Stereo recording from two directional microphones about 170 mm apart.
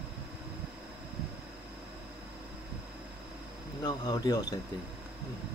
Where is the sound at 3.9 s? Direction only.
25° left (ahead or behind).